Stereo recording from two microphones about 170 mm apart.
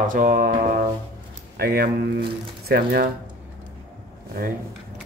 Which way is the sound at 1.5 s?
65° right (ahead or behind).